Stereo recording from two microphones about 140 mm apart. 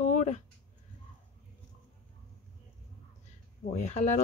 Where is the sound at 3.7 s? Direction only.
55° left (ahead or behind).